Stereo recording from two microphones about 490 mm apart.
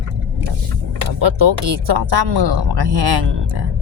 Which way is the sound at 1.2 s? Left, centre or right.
Right.